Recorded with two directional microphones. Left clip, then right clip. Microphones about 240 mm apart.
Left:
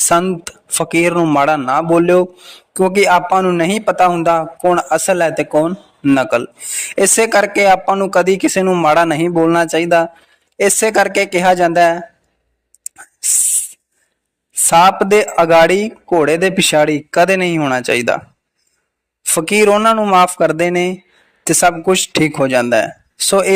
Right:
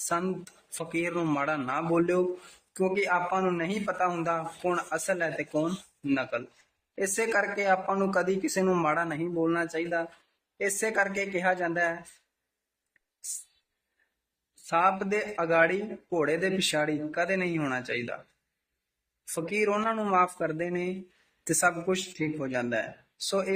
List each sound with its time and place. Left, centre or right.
0.1 s speech: left
1.1 s a man's voice: left
1.4 s speech: left
8.9 s speech: left
14.7 s speech: left
19.3 s speech: left